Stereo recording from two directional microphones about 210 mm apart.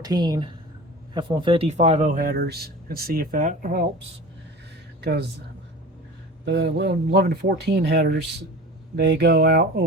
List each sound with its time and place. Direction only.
0.0 s speech: 20° right (ahead or behind); by 3.8 s 40° right (ahead or behind)
4.9 s speech: 50° right (ahead or behind)
6.4 s speech: 55° right (ahead or behind)